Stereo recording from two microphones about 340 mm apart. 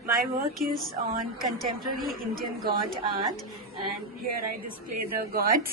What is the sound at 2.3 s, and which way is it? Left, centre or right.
Speech, right.